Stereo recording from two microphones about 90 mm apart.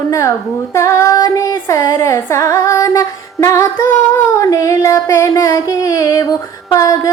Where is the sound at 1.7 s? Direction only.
30° left (ahead or behind).